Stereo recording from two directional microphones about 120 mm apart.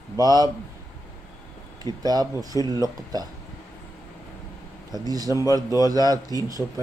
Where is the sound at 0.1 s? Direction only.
35° right (ahead or behind).